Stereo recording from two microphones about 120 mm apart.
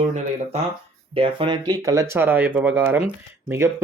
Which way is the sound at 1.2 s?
45° right (ahead or behind).